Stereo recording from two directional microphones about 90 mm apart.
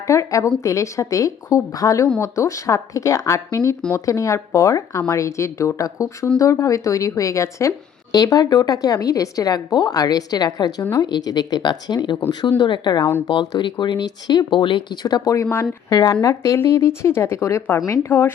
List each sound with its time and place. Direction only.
0.1 s speech: 35° left (ahead or behind)
8.1 s speech: 45° left (ahead or behind); by 14.9 s 65° left (ahead or behind)
15.0 s speech: 40° left (ahead or behind)
15.9 s speech: 50° left (ahead or behind)
16.2 s speech: 35° left (ahead or behind)